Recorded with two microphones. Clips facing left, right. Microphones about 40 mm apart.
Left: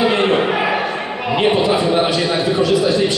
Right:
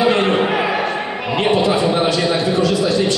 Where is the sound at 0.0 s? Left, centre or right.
Centre.